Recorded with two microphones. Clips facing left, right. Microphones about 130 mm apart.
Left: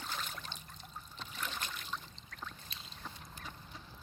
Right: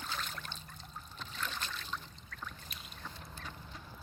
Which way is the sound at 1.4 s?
20° left (ahead or behind).